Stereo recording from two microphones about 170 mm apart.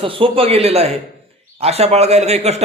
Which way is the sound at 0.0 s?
30° right (ahead or behind).